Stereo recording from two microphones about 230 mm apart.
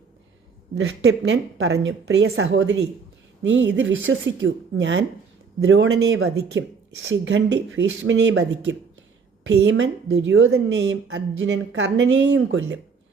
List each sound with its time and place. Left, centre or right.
0.8 s a woman's voice: right